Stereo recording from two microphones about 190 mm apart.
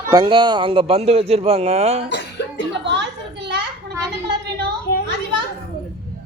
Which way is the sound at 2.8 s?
65° right (ahead or behind).